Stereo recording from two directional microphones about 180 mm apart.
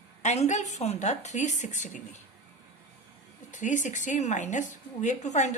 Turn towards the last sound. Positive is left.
turn(degrees=40)  # may be behind; listen again after turning